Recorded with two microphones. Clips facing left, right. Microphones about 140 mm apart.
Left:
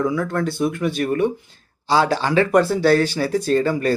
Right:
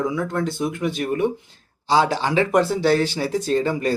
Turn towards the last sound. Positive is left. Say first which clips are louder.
# left 2 dB
turn(degrees=-20)  # may be behind; listen again after turning